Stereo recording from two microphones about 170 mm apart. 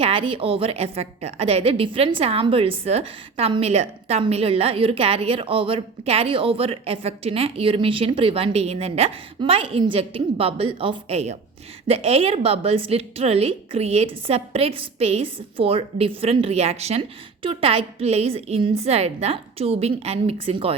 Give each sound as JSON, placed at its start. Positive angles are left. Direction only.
{"t": 0.0, "sound": "a woman's voice", "side_deg": -30}